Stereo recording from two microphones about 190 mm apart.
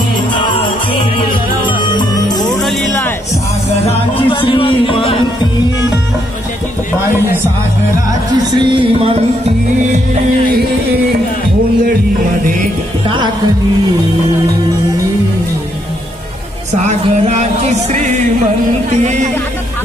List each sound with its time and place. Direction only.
0.3 s music: 25° left (ahead or behind)
1.8 s music: 20° left (ahead or behind)
2.5 s music: centre (ahead or behind)
3.8 s music: 25° left (ahead or behind)
8.6 s music: 25° right (ahead or behind)
13.0 s music: 25° right (ahead or behind)
16.8 s music: 35° right (ahead or behind)